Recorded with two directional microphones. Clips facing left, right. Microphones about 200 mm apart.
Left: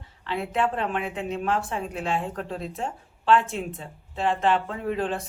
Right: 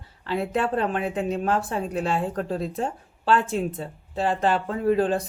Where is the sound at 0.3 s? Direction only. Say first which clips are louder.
Right 2 dB; 40° right (ahead or behind).